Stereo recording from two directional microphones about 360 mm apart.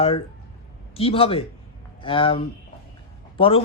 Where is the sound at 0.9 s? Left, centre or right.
Centre.